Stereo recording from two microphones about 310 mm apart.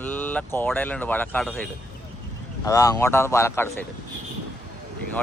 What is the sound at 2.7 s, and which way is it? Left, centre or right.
Speech, centre.